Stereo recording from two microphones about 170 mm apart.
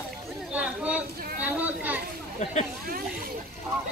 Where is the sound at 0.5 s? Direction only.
10° right (ahead or behind).